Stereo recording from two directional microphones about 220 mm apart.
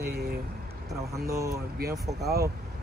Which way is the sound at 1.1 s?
15° right (ahead or behind).